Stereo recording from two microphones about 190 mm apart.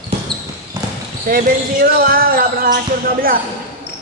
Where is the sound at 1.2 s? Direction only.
50° right (ahead or behind).